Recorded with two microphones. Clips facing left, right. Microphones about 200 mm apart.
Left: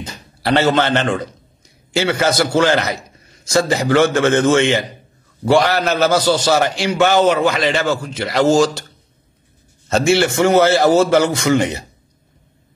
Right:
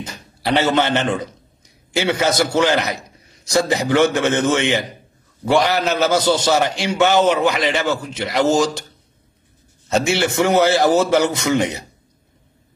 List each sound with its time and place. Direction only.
0.1 s a sound: 20° right (ahead or behind)
0.9 s a man's voice: 10° right (ahead or behind)
2.0 s a man's voice: 20° right (ahead or behind)
9.8 s speech: 20° right (ahead or behind)